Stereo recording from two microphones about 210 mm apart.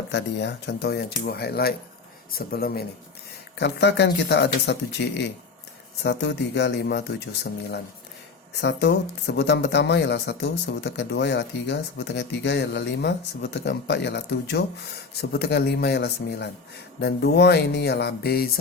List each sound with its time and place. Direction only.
0.1 s speech: 55° left (ahead or behind)
8.6 s speech: 55° left (ahead or behind)